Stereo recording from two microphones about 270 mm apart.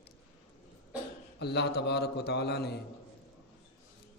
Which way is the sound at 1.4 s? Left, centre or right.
Left.